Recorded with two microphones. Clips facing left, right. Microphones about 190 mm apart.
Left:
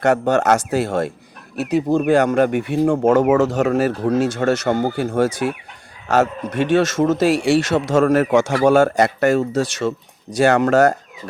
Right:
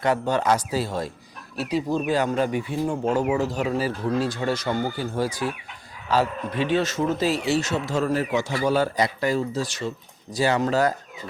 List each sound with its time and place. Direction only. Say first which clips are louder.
0.0 s speech: left 6 dB; 70° left (ahead or behind)
1.9 s speech: left 9 dB; 55° left (ahead or behind); by 5.5 s 75° left (ahead or behind)
6.7 s speech: left 9 dB; 85° left